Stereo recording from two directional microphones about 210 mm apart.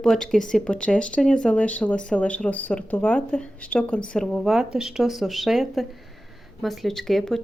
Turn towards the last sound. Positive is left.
turn(degrees=0)  # may be behind; listen again after turning